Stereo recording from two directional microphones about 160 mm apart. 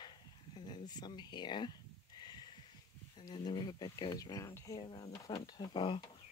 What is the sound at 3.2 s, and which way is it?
Speech, 25° left (ahead or behind).